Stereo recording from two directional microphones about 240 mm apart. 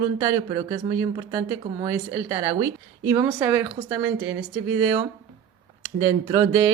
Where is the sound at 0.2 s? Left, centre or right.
Centre.